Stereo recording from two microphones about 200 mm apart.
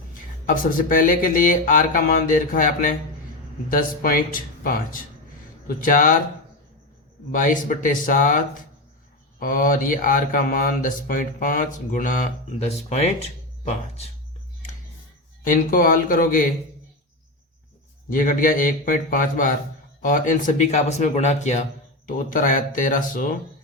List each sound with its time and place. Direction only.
0.4 s speech: 45° left (ahead or behind)
7.3 s speech: 40° left (ahead or behind)
15.4 s speech: 45° left (ahead or behind)
18.1 s speech: 45° left (ahead or behind)